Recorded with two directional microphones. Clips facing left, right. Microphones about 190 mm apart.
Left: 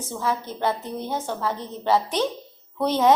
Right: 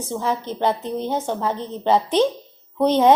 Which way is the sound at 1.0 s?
20° right (ahead or behind).